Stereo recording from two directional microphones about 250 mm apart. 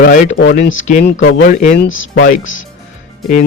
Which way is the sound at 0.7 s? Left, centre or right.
Left.